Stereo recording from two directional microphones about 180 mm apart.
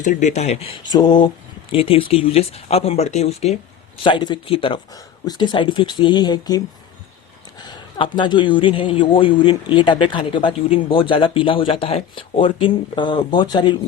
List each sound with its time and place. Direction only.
0.0 s speech: 45° left (ahead or behind); by 6.6 s 25° left (ahead or behind)
7.6 s speech: 25° left (ahead or behind)